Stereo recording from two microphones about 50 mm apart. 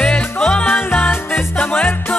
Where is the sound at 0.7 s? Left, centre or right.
Left.